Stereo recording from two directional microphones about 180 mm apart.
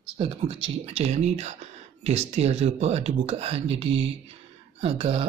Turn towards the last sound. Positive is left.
turn(degrees=-35)  # may be behind; listen again after turning